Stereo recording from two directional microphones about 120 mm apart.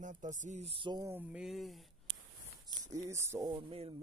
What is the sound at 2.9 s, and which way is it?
Speech, 25° right (ahead or behind).